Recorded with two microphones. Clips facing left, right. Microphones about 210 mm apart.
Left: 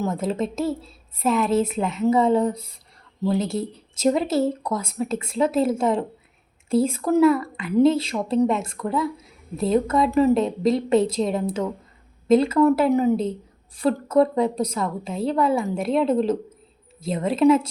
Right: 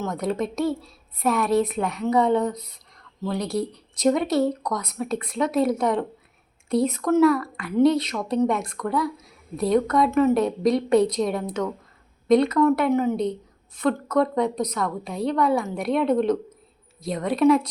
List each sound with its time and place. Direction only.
0.0 s a woman's voice: 25° left (ahead or behind)
1.3 s a woman's voice: centre (ahead or behind)
1.5 s a woman's voice: 25° left (ahead or behind)